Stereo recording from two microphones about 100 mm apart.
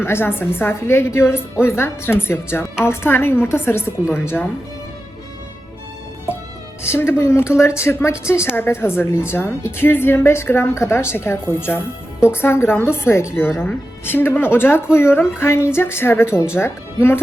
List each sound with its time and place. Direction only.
0.0 s a woman's voice: 25° left (ahead or behind)
6.8 s a woman's voice: 25° left (ahead or behind)